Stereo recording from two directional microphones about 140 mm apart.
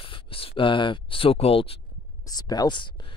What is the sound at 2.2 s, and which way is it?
Speech, 25° left (ahead or behind).